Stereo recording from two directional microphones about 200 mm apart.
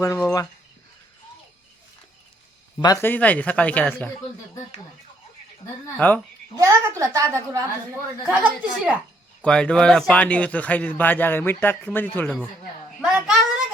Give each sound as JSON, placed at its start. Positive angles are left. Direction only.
{"t": 0.0, "sound": "speech", "side_deg": 10}
{"t": 2.8, "sound": "speech", "side_deg": 15}
{"t": 6.0, "sound": "speech", "side_deg": 10}
{"t": 6.6, "sound": "a woman's voice", "side_deg": -15}